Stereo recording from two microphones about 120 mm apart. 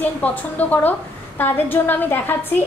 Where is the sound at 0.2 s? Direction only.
15° left (ahead or behind).